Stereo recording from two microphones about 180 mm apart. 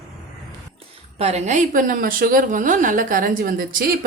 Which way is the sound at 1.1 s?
35° right (ahead or behind).